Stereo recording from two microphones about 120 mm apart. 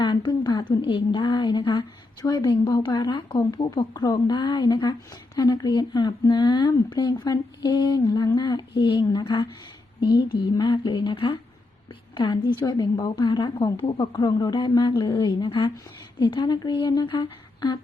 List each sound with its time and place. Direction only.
0.0 s a woman's voice: 40° left (ahead or behind)